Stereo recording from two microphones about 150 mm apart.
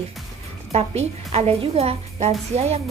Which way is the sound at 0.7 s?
45° right (ahead or behind).